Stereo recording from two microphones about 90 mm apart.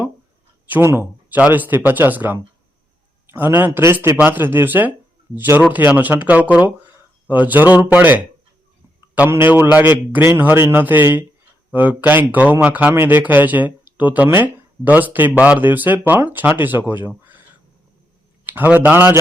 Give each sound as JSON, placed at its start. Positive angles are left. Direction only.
{"t": 0.7, "sound": "a man's voice", "side_deg": -25}
{"t": 9.3, "sound": "speech", "side_deg": -25}
{"t": 17.1, "sound": "a sound", "side_deg": -20}
{"t": 18.4, "sound": "speech", "side_deg": -20}